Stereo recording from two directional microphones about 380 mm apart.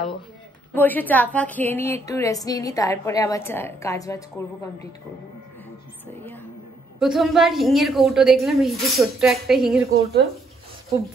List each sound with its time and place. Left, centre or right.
0.7 s a woman's voice: centre
7.0 s a woman's voice: centre
9.8 s speech: right